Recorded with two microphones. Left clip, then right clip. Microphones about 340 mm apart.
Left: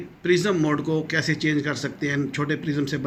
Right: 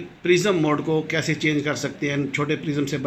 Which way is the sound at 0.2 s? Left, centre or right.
Centre.